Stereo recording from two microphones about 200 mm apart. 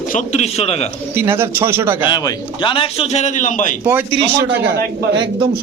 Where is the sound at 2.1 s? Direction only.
20° left (ahead or behind); by 3.7 s 40° left (ahead or behind).